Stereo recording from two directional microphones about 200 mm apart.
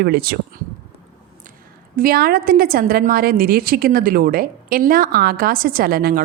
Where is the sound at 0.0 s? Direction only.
50° right (ahead or behind).